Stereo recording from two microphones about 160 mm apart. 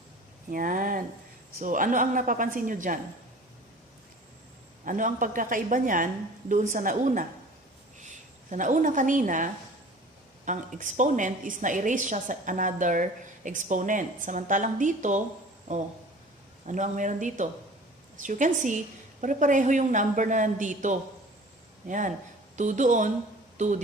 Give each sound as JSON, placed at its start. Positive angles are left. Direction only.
{"t": 0.5, "sound": "a man's voice", "side_deg": -60}
{"t": 4.9, "sound": "a man's voice", "side_deg": -55}
{"t": 16.6, "sound": "a woman's voice", "side_deg": -50}